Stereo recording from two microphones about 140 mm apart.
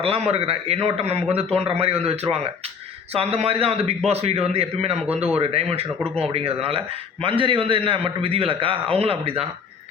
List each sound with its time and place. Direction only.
0.0 s a man's voice: 45° right (ahead or behind)